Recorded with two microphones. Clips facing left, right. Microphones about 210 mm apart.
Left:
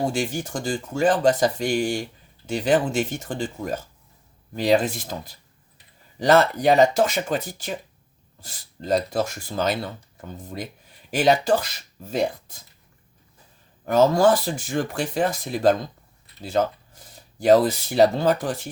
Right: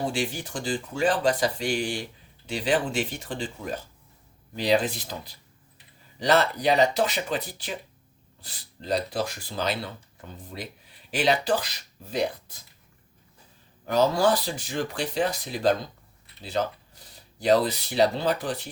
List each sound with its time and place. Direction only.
0.0 s speech: 45° left (ahead or behind)
13.8 s speech: 50° left (ahead or behind)